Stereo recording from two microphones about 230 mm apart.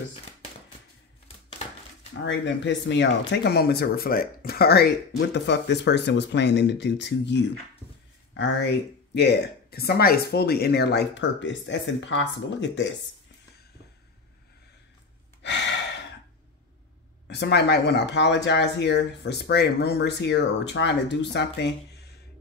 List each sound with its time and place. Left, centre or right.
2.2 s speech: left
17.3 s speech: left